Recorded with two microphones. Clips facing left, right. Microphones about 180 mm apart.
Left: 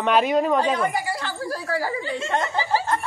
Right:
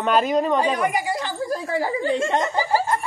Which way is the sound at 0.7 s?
15° right (ahead or behind).